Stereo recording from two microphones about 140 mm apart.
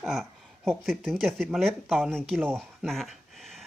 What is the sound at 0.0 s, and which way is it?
Speech, centre (ahead or behind).